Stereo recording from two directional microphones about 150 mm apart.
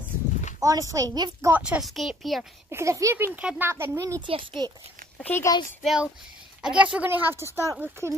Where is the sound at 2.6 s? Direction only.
20° right (ahead or behind).